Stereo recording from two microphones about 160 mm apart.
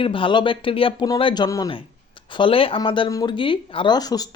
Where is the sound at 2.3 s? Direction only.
35° left (ahead or behind).